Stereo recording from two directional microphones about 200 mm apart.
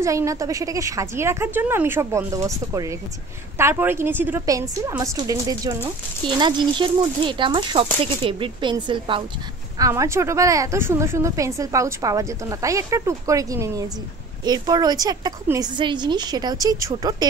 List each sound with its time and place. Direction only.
0.0 s a woman's voice: 15° right (ahead or behind)